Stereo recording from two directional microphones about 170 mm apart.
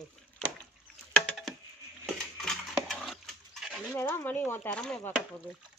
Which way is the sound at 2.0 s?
Centre (ahead or behind).